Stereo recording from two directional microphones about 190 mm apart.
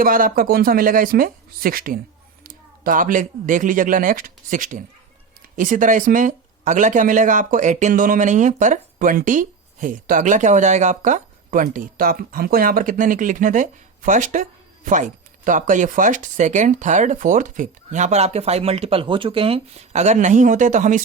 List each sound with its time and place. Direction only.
0.0 s speech: 50° right (ahead or behind)